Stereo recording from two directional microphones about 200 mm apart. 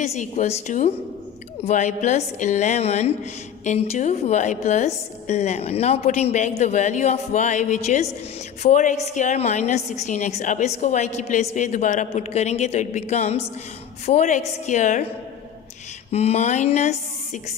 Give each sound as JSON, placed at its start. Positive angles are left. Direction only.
{"t": 0.0, "sound": "a woman's voice", "side_deg": 35}
{"t": 16.1, "sound": "a woman's voice", "side_deg": 30}